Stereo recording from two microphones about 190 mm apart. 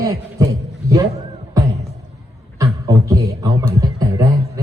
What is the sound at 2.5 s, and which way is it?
Beatboxing, 15° right (ahead or behind).